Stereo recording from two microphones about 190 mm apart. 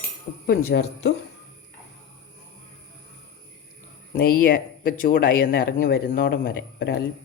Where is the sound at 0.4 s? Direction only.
60° left (ahead or behind).